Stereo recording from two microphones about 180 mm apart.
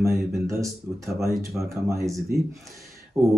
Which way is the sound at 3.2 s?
15° right (ahead or behind).